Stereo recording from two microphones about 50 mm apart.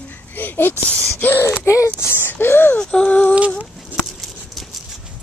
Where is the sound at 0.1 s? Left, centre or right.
Left.